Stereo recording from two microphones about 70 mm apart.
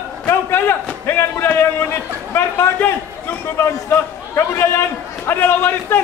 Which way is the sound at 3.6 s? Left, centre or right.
Left.